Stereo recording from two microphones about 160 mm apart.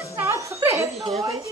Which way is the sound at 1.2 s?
20° right (ahead or behind).